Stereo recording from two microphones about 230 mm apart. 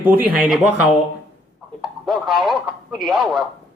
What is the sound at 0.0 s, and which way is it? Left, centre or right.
Speech, centre.